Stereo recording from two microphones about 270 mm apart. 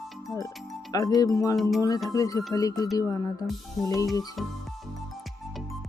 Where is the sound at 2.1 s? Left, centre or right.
Centre.